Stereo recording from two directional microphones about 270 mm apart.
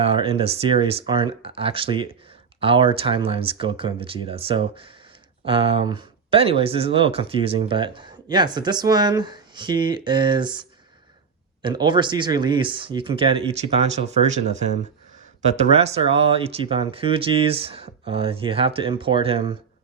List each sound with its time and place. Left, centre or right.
0.0 s speech: right
15.7 s speech: right